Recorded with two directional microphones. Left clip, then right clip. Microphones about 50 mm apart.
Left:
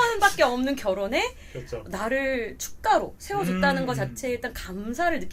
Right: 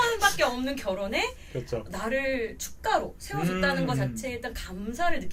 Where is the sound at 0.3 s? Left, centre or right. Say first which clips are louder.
Left 4 dB; left.